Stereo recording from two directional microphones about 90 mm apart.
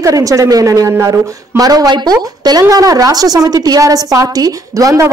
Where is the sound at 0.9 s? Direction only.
25° right (ahead or behind).